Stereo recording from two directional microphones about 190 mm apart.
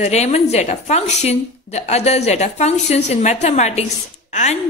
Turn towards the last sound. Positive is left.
turn(degrees=35)  # may be behind; listen again after turning